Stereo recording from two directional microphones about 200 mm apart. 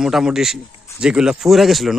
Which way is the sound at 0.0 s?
5° right (ahead or behind).